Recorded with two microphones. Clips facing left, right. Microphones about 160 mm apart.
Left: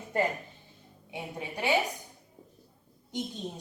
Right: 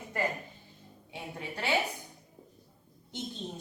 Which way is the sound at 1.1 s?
15° left (ahead or behind).